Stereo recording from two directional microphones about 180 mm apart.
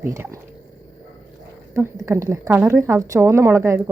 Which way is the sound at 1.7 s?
15° right (ahead or behind).